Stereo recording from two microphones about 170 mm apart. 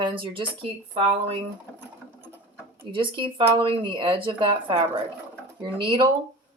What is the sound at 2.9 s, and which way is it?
Speech, 30° right (ahead or behind).